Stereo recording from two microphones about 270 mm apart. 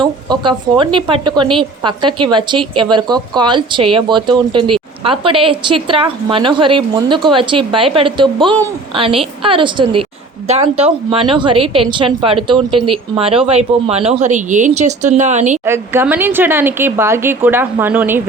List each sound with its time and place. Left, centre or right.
0.0 s a woman's voice: centre
15.6 s speech: centre